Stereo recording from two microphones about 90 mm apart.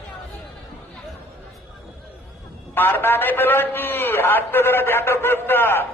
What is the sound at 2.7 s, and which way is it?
A man's voice, 25° left (ahead or behind).